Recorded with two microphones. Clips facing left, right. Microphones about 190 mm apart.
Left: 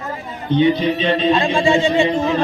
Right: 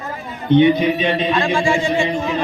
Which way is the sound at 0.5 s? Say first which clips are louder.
Right 2 dB; 15° right (ahead or behind).